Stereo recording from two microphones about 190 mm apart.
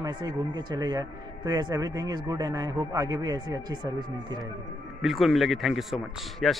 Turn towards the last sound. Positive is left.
turn(degrees=0)  # may be behind; listen again after turning